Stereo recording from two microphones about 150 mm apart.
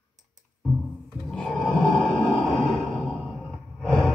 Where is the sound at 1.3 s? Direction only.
5° left (ahead or behind).